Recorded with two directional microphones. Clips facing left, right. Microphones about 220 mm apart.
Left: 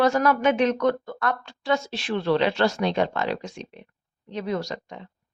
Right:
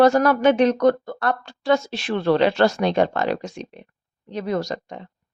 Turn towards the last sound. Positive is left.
turn(degrees=-40)  # may be behind; listen again after turning